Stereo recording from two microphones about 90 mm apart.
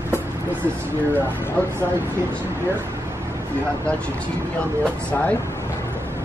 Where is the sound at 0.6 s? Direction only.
25° right (ahead or behind).